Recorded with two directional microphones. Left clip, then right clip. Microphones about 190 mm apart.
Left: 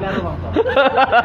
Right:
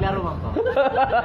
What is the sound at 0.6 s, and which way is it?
Speech, 10° left (ahead or behind).